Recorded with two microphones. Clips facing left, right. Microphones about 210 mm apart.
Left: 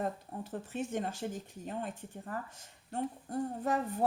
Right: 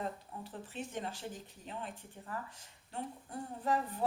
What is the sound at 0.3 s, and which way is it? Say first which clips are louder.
Speech: left 6 dB; 45° left (ahead or behind).